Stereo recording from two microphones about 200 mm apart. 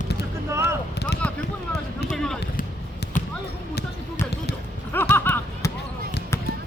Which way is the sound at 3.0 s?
55° left (ahead or behind).